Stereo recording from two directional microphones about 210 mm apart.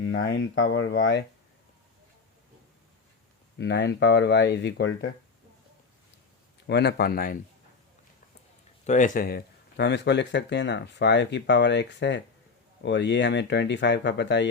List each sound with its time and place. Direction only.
0.5 s speech: 60° left (ahead or behind)
3.6 s speech: 55° left (ahead or behind)
6.7 s speech: 55° left (ahead or behind)
8.9 s speech: 35° left (ahead or behind); by 14.4 s 55° left (ahead or behind)